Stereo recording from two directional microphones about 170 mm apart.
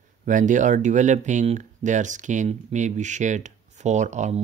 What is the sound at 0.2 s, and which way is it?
Speech, 50° right (ahead or behind).